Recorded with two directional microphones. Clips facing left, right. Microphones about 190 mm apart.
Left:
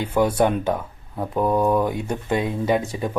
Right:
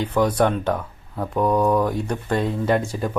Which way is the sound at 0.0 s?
5° left (ahead or behind).